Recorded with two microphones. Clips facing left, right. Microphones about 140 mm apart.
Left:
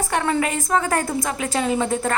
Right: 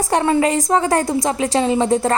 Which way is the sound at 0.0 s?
30° right (ahead or behind).